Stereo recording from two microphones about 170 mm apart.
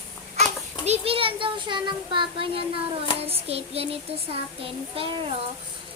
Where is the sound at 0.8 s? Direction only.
35° right (ahead or behind).